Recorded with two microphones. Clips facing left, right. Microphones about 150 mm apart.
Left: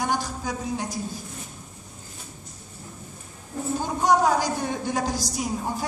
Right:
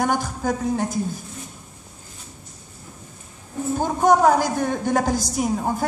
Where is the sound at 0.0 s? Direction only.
50° right (ahead or behind).